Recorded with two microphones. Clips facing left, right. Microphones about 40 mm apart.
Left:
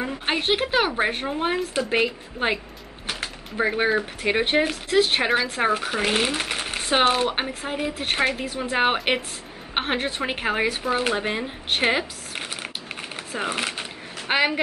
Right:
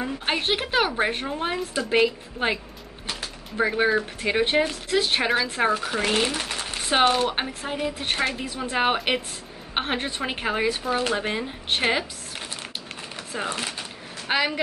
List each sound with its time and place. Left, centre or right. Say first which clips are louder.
0.3 s speech: left 2 dB; centre; by 6.9 s left
6.9 s speech: even; centre
13.1 s a sound: left 1 dB; centre
13.6 s speech: left 3 dB; left
14.2 s speech: left 2 dB; left